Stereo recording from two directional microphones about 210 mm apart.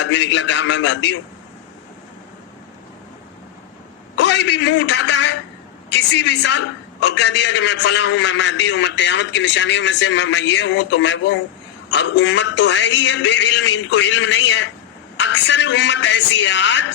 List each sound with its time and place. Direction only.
0.0 s a man's voice: 55° left (ahead or behind)
4.2 s a sound: 55° left (ahead or behind)
4.5 s a man's voice: 55° left (ahead or behind)